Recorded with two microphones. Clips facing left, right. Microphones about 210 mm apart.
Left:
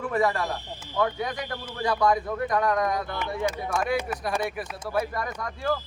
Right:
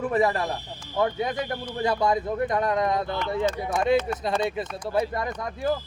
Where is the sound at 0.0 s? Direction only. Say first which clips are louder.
Right 2 dB; 20° right (ahead or behind).